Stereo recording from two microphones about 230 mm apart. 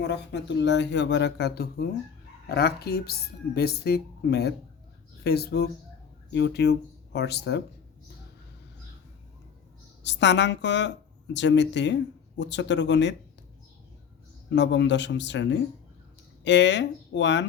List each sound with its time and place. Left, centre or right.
0.1 s speech: left
10.0 s speech: left
14.5 s speech: left